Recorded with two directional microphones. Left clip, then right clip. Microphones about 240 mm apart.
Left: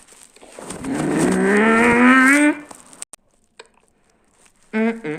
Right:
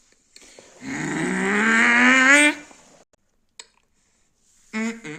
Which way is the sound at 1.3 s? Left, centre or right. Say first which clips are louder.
Left 2 dB; right.